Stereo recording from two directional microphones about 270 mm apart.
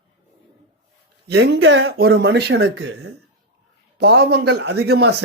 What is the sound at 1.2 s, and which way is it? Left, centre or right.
Speech, right.